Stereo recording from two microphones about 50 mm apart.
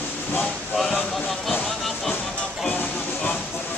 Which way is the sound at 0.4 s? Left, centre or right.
Centre.